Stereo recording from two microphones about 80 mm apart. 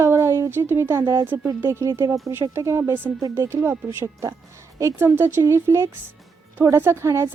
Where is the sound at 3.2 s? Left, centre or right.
Right.